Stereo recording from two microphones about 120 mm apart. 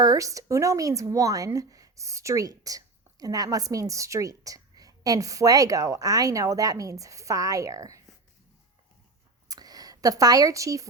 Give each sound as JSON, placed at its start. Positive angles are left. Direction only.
{"t": 0.0, "sound": "a woman's voice", "side_deg": -30}
{"t": 9.5, "sound": "speech", "side_deg": -30}